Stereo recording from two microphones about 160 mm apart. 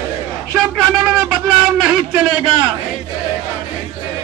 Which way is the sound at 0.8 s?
Centre (ahead or behind).